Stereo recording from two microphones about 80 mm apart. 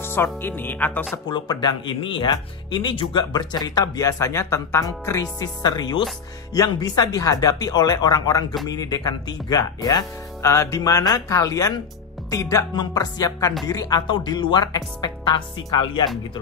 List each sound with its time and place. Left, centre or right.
0.0 s speech: left
1.3 s speech: left
5.4 s speech: left
14.0 s speech: left